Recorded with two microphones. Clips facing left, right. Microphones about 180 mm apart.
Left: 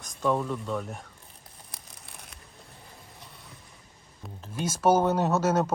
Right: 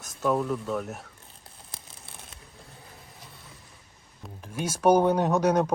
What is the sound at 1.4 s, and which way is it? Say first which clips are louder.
Tearing: right 2 dB; 25° right (ahead or behind).